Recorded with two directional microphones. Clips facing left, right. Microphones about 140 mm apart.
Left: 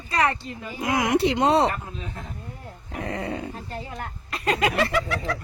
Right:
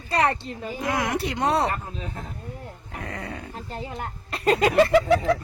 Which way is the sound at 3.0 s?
25° left (ahead or behind).